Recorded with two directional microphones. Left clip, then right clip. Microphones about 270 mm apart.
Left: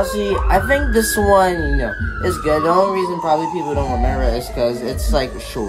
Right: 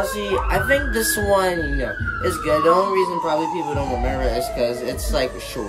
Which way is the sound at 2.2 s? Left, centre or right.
Left.